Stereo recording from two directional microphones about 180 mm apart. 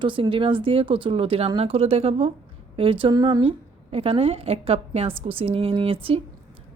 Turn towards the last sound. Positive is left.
turn(degrees=-30)  # may be behind; listen again after turning